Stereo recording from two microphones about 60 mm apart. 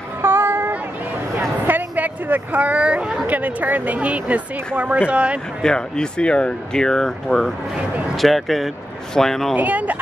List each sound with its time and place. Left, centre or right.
0.2 s a sound: right; by 3.2 s centre
3.3 s speech: right
5.6 s speech: centre
9.6 s speech: right